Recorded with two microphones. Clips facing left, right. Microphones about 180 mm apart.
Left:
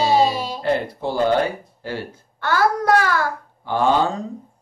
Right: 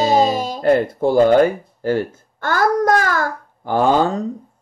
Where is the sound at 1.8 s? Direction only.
45° right (ahead or behind).